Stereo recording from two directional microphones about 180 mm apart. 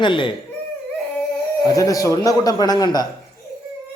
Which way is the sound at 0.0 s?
25° left (ahead or behind).